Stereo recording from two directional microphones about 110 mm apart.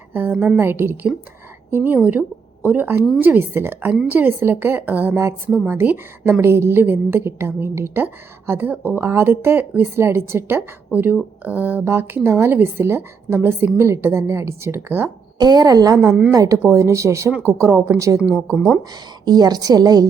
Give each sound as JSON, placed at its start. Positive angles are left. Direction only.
{"t": 0.1, "sound": "a woman's voice", "side_deg": -20}
{"t": 15.4, "sound": "a woman's voice", "side_deg": -35}
{"t": 16.0, "sound": "a woman's voice", "side_deg": -10}
{"t": 16.3, "sound": "a woman's voice", "side_deg": -30}